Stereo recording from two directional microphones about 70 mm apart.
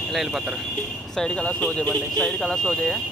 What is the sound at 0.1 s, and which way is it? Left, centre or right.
Speech, centre.